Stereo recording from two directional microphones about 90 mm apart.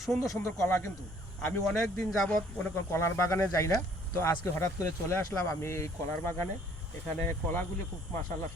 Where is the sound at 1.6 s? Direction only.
Centre (ahead or behind).